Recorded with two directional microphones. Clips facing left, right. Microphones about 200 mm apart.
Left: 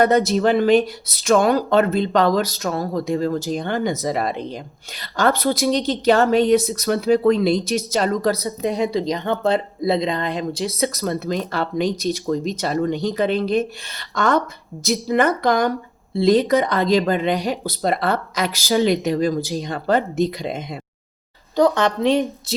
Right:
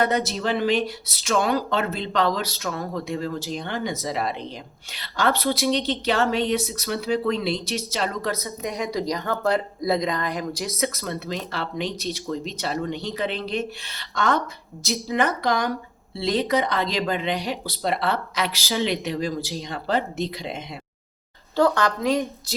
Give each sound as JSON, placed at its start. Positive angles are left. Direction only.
{"t": 0.0, "sound": "speech", "side_deg": 50}
{"t": 21.5, "sound": "a woman's voice", "side_deg": 20}